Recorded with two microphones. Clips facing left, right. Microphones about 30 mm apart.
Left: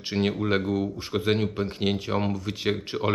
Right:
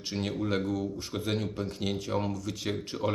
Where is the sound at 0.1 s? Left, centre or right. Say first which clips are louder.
Left 6 dB; left.